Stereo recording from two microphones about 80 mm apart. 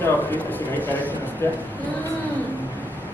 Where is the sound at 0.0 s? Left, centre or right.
Left.